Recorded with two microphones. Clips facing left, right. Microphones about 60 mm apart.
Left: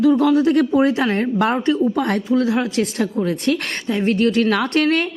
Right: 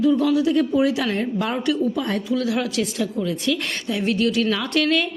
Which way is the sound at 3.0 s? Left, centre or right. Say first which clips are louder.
Left 4 dB; left.